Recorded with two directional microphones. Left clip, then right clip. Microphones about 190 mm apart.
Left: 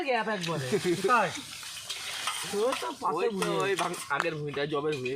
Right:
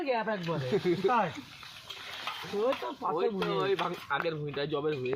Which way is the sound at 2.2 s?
5° left (ahead or behind).